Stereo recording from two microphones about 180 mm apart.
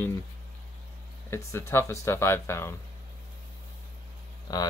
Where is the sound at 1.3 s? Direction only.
15° left (ahead or behind).